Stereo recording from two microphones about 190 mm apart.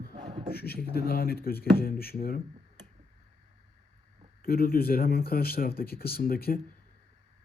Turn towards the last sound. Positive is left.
turn(degrees=50)  # may be behind; listen again after turning